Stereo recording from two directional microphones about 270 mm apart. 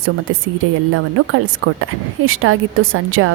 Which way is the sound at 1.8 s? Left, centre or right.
Right.